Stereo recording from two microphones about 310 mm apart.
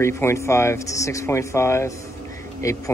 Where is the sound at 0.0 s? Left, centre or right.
Centre.